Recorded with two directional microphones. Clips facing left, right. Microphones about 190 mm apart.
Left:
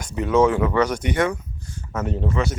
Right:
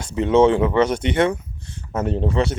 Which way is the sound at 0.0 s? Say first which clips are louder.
Right 3 dB; 25° right (ahead or behind).